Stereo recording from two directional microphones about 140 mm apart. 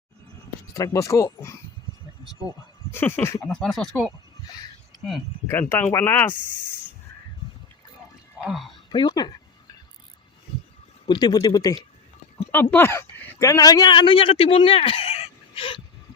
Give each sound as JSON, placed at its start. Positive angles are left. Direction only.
{"t": 0.7, "sound": "a man's voice", "side_deg": 20}
{"t": 2.9, "sound": "speech", "side_deg": 15}
{"t": 3.4, "sound": "speech", "side_deg": 5}
{"t": 5.5, "sound": "speech", "side_deg": 15}
{"t": 8.4, "sound": "speech", "side_deg": 0}
{"t": 8.9, "sound": "speech", "side_deg": 30}
{"t": 11.0, "sound": "a man's voice", "side_deg": 30}
{"t": 12.7, "sound": "speech", "side_deg": 15}